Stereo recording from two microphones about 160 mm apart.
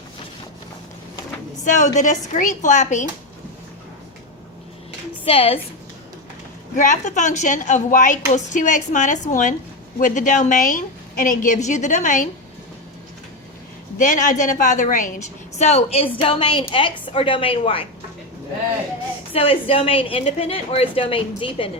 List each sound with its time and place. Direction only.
1.6 s a woman's voice: 50° left (ahead or behind)
5.2 s a woman's voice: 35° left (ahead or behind)
6.7 s a woman's voice: 50° left (ahead or behind)
14.0 s a woman's voice: 55° left (ahead or behind); by 17.8 s 35° left (ahead or behind)
19.3 s a woman's voice: 35° left (ahead or behind)